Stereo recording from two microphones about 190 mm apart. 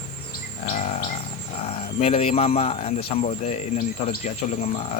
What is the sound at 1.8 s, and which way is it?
Cricket, 30° left (ahead or behind).